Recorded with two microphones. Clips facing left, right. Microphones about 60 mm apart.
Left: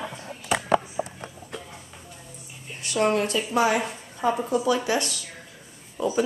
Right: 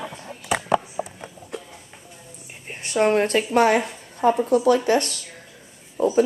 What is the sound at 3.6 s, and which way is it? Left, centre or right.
Speech, right.